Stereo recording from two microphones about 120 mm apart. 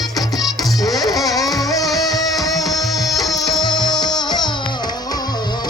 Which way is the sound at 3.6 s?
35° left (ahead or behind).